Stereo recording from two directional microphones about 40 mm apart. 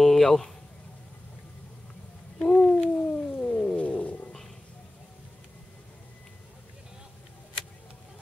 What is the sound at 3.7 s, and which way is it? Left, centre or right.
Wild animals, left.